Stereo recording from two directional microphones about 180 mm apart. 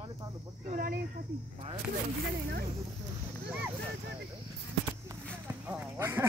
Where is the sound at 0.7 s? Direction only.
55° right (ahead or behind).